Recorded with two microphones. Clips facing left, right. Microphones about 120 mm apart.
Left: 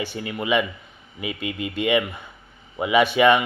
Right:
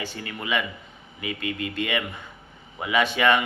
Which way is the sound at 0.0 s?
15° left (ahead or behind).